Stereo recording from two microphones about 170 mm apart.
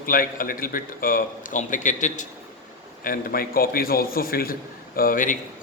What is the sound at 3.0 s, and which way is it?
A man's voice, 60° left (ahead or behind).